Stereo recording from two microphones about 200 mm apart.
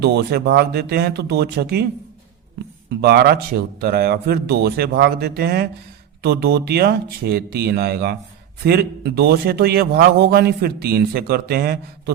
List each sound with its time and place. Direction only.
0.0 s speech: 55° right (ahead or behind)
3.0 s a man's voice: 55° right (ahead or behind)